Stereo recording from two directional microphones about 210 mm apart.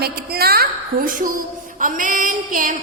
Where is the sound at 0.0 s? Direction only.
45° right (ahead or behind).